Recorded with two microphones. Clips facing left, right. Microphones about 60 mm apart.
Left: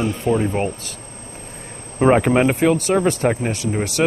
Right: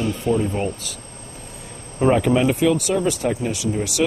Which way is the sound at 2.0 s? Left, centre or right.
Left.